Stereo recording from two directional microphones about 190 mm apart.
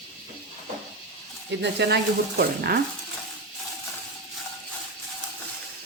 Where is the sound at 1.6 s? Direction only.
65° right (ahead or behind).